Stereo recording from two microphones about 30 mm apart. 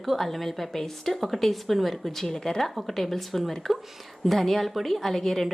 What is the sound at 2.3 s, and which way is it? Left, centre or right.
Speech, left.